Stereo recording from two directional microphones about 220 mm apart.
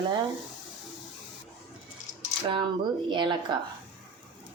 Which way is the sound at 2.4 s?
20° right (ahead or behind).